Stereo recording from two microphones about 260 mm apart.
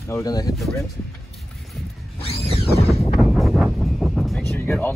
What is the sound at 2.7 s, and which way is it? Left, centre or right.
Wind noise, left.